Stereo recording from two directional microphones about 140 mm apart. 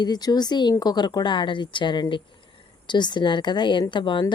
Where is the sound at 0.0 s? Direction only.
30° left (ahead or behind).